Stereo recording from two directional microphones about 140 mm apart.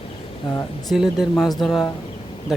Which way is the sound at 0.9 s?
Centre (ahead or behind).